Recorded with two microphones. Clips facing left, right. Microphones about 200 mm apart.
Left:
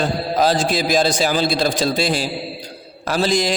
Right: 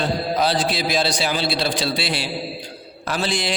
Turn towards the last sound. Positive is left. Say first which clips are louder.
# left 6 dB
turn(degrees=40)  # may be behind; listen again after turning